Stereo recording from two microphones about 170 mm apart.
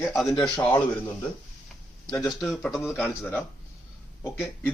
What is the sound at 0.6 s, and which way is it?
Speech, 15° left (ahead or behind).